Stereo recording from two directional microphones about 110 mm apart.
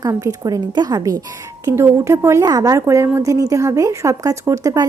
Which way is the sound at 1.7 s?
25° right (ahead or behind).